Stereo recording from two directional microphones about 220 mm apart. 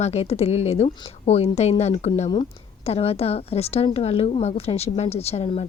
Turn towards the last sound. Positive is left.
turn(degrees=25)  # may be behind; listen again after turning